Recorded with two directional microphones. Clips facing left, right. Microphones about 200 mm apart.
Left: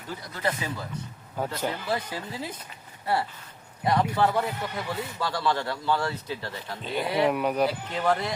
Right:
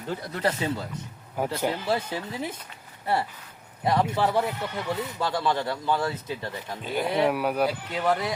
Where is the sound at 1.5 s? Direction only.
15° right (ahead or behind).